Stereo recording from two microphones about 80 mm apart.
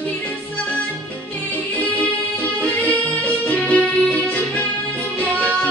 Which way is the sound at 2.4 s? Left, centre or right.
Centre.